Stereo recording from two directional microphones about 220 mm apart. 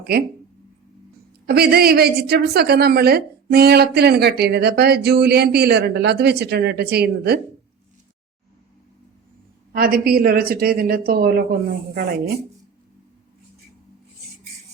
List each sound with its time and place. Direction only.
1.5 s a woman's voice: 45° right (ahead or behind)
9.7 s a woman's voice: 40° right (ahead or behind)